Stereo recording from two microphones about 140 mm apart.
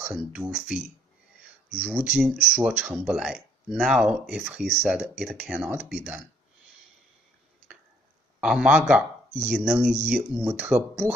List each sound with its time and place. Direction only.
0.0 s speech: 10° right (ahead or behind)
8.4 s speech: 10° right (ahead or behind)